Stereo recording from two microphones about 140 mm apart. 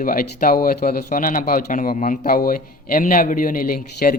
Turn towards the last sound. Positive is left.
turn(degrees=90)